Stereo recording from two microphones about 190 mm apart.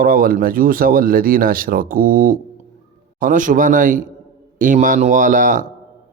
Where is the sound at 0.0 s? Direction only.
50° right (ahead or behind).